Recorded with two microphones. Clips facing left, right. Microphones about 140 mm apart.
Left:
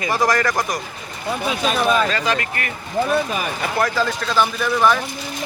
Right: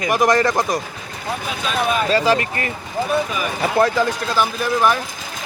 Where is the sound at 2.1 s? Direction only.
30° right (ahead or behind).